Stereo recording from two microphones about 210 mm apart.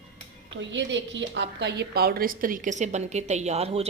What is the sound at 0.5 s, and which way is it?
A woman's voice, 60° right (ahead or behind).